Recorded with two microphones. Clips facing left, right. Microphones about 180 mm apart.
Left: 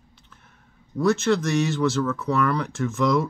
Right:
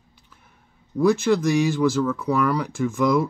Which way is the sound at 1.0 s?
10° right (ahead or behind).